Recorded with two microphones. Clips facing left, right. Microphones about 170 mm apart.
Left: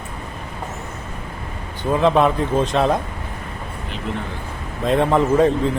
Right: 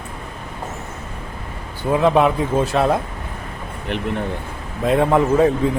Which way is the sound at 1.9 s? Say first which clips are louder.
Right 1 dB; 5° right (ahead or behind).